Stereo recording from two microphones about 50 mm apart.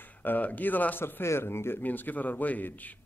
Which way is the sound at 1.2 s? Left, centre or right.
Left.